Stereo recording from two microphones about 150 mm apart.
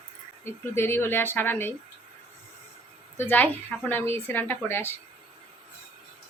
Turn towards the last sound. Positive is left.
turn(degrees=15)  # may be behind; listen again after turning